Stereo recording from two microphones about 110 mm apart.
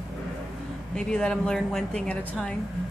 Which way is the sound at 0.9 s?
5° left (ahead or behind).